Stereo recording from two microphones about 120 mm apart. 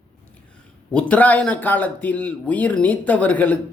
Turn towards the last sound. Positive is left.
turn(degrees=15)  # may be behind; listen again after turning